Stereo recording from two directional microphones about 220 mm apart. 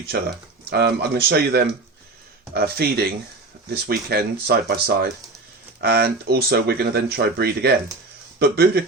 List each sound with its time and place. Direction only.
0.1 s speech: 45° right (ahead or behind)